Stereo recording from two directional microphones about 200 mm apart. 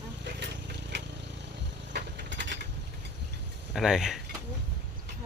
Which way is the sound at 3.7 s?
Centre (ahead or behind).